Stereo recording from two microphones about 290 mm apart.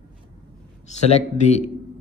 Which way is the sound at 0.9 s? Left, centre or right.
Left.